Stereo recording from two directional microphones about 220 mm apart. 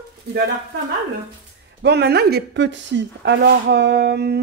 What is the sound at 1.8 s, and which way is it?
Speech, 50° right (ahead or behind).